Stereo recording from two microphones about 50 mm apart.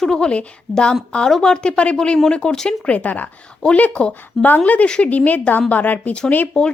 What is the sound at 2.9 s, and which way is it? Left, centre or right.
A woman's voice, left.